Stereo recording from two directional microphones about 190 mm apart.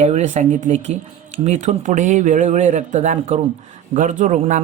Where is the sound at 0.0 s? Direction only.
35° right (ahead or behind).